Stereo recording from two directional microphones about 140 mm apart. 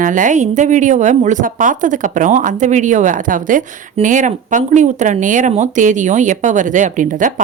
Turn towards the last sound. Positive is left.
turn(degrees=-65)  # may be behind; listen again after turning